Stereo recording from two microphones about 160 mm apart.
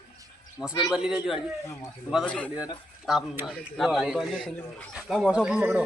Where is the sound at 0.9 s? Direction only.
5° right (ahead or behind).